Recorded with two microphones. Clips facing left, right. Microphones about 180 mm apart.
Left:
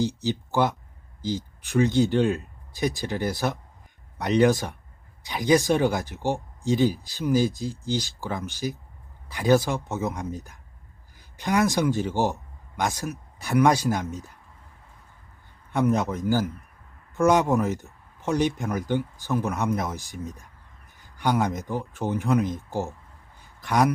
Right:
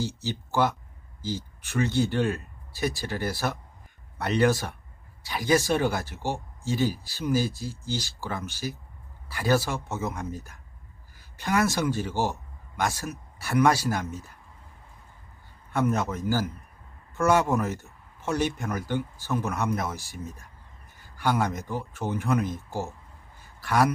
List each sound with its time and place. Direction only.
0.2 s a man's voice: 15° left (ahead or behind)
15.7 s speech: 15° left (ahead or behind)
21.0 s a sound: 15° left (ahead or behind)
21.7 s a man's voice: 15° left (ahead or behind)